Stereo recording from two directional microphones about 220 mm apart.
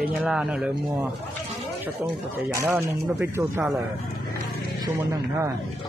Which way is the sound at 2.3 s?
10° right (ahead or behind).